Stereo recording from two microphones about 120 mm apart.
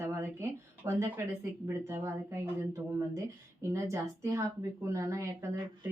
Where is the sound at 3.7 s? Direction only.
25° right (ahead or behind).